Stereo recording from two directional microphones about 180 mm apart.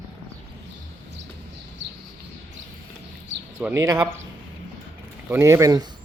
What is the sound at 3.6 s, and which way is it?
Speech, 15° right (ahead or behind).